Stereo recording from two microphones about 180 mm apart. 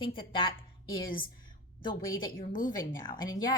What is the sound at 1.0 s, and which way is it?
Speech, 50° left (ahead or behind).